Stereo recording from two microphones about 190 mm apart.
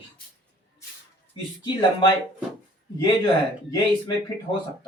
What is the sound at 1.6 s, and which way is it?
Speech, 25° left (ahead or behind).